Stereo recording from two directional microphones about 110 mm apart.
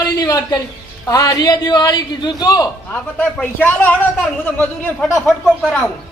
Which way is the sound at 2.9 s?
15° left (ahead or behind).